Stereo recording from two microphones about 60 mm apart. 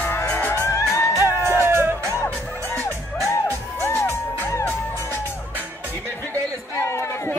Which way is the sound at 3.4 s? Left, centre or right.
Left.